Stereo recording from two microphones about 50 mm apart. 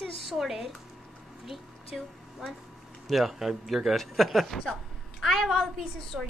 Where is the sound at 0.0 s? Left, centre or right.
Centre.